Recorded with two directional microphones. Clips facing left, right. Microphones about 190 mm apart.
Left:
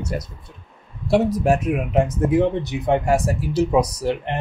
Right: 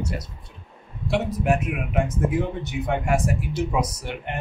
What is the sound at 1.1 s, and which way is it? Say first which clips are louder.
Speech: left 5 dB; 40° left (ahead or behind).